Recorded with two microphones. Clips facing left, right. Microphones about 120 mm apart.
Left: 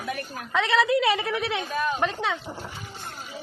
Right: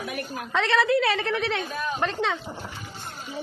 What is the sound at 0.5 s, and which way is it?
A woman's voice, 10° left (ahead or behind).